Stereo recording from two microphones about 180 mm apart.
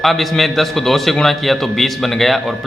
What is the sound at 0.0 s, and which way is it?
A man's voice, centre (ahead or behind).